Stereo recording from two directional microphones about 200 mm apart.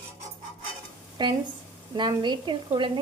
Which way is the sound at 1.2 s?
20° right (ahead or behind).